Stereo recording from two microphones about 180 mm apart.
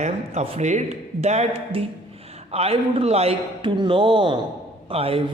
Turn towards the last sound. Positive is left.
turn(degrees=-30)  # may be behind; listen again after turning